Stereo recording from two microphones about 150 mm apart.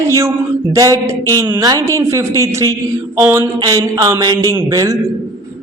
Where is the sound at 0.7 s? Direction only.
20° right (ahead or behind).